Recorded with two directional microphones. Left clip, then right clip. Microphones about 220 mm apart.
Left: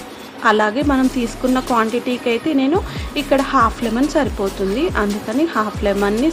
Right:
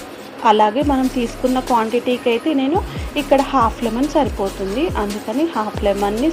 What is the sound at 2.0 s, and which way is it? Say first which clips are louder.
Speech: right 2 dB; 45° left (ahead or behind).